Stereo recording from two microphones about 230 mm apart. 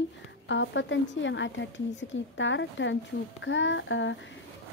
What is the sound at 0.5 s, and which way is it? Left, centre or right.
A woman's voice, left.